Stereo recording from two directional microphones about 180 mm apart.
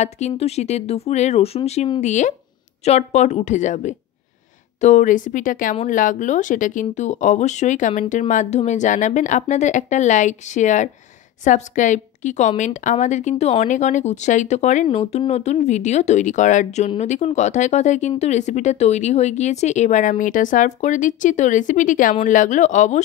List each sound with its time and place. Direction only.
0.0 s a woman's voice: 40° left (ahead or behind)